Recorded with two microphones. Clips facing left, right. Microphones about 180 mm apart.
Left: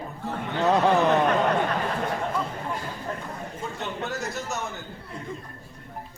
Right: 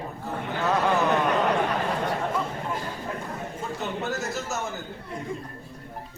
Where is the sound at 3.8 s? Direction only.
Centre (ahead or behind).